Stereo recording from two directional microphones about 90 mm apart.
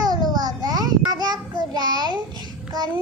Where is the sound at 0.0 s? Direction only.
50° right (ahead or behind).